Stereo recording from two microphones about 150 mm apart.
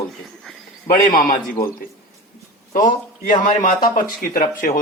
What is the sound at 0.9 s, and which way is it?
Speech, 65° left (ahead or behind).